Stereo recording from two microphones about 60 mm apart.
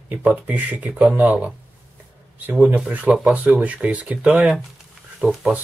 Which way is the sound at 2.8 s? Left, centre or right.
Right.